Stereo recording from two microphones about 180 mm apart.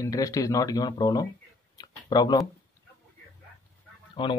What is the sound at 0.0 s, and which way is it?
Speech, 20° left (ahead or behind).